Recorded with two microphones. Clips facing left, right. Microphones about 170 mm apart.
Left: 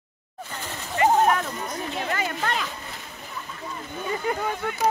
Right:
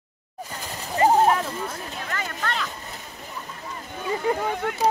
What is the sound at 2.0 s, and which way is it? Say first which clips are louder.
Speech: left 2 dB; 15° left (ahead or behind).